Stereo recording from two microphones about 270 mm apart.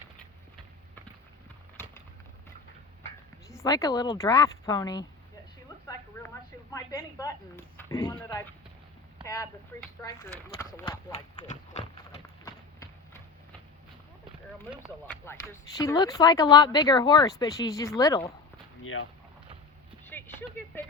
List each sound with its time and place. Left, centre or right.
3.5 s speech: centre
6.2 s a sound: centre
6.7 s speech: centre
11.4 s run: left
12.5 s clip-clop: centre
15.1 s speech: centre
20.1 s a sound: centre